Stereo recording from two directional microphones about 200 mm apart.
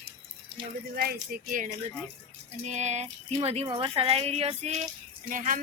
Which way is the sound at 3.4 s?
30° right (ahead or behind).